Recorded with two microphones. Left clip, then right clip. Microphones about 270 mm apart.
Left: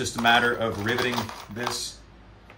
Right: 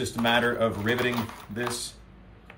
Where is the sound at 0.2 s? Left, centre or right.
Centre.